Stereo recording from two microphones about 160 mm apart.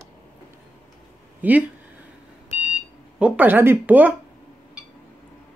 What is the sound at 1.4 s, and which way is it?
Speech, 10° right (ahead or behind).